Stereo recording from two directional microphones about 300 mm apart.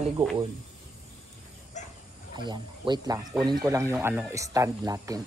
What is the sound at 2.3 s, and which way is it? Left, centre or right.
Speech, centre.